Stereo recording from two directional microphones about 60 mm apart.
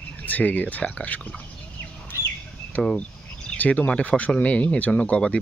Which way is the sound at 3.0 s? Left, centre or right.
Left.